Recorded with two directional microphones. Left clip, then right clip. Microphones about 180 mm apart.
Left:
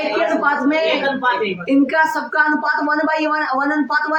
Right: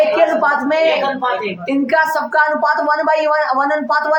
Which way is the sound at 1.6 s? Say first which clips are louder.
Right 1 dB; 20° right (ahead or behind).